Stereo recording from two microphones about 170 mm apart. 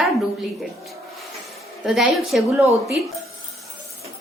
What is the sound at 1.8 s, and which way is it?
Speech, centre (ahead or behind).